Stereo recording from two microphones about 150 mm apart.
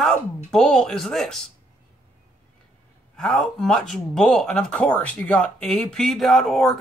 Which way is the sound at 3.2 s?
Centre (ahead or behind).